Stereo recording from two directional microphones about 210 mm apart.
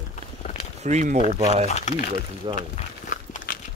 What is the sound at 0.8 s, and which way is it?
Speech, 35° right (ahead or behind).